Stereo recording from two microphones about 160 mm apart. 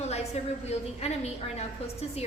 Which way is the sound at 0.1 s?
40° left (ahead or behind).